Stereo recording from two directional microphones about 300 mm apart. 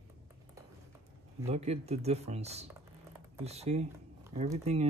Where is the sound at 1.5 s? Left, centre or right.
Right.